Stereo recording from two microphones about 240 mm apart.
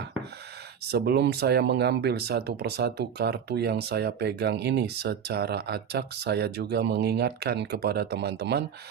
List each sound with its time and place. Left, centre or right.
0.9 s speech: right